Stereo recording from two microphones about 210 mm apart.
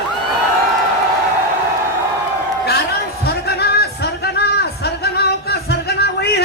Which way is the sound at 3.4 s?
50° left (ahead or behind).